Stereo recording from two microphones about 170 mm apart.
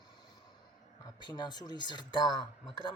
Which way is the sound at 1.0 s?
25° left (ahead or behind).